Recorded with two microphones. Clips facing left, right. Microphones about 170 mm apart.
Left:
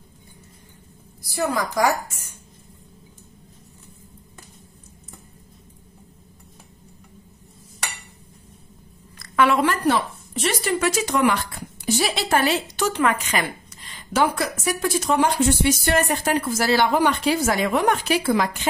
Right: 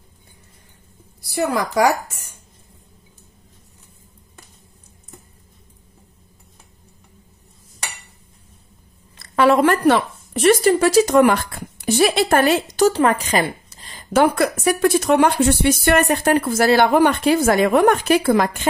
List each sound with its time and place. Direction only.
1.2 s speech: 65° right (ahead or behind)
9.2 s a sound: 35° right (ahead or behind)
9.7 s speech: 60° right (ahead or behind)
10.6 s speech: 35° right (ahead or behind)
14.1 s speech: 55° right (ahead or behind)